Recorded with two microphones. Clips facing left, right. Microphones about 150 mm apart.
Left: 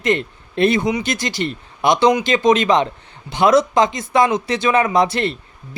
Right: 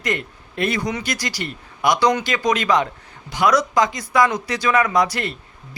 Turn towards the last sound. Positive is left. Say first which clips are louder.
# left 3 dB
turn(degrees=25)  # may be behind; listen again after turning